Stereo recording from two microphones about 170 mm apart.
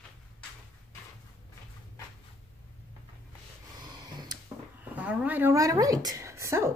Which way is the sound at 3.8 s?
25° right (ahead or behind).